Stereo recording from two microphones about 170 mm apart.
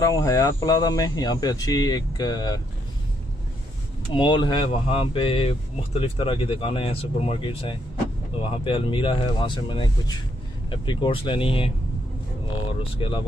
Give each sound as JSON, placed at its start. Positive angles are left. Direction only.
{"t": 0.0, "sound": "speech", "side_deg": 20}
{"t": 4.1, "sound": "speech", "side_deg": 25}
{"t": 12.9, "sound": "speech", "side_deg": 30}